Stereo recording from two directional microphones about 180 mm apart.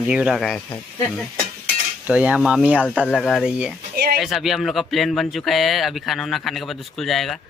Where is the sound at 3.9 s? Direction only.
60° right (ahead or behind).